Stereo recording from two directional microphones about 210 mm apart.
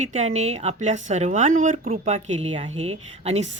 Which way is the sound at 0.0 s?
35° right (ahead or behind).